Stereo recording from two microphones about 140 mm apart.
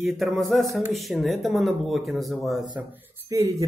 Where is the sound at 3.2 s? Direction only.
20° right (ahead or behind).